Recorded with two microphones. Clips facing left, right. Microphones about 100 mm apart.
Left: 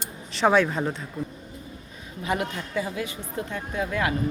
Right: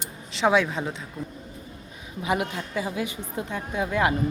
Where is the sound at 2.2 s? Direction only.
15° right (ahead or behind).